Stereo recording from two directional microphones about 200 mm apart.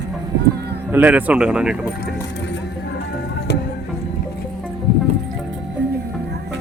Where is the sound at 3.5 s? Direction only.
55° left (ahead or behind).